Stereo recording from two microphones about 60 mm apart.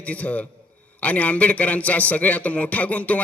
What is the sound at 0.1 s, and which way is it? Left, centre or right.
A man's voice, left.